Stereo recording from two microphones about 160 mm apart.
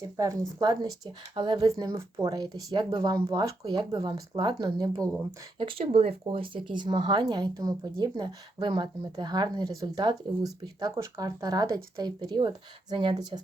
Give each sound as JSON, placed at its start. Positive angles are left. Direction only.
{"t": 0.0, "sound": "speech", "side_deg": -25}
{"t": 5.5, "sound": "speech", "side_deg": -35}